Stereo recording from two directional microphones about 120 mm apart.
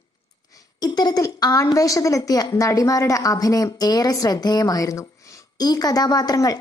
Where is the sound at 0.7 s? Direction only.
35° left (ahead or behind).